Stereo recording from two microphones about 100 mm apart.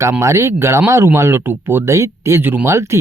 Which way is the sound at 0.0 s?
30° right (ahead or behind).